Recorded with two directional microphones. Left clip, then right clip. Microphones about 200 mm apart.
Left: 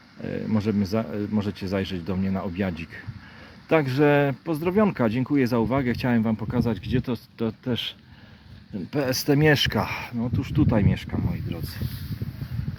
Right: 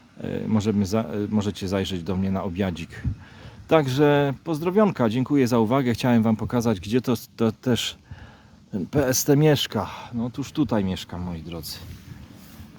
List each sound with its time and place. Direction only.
0.2 s speech: 20° right (ahead or behind)
10.8 s speech: 15° right (ahead or behind)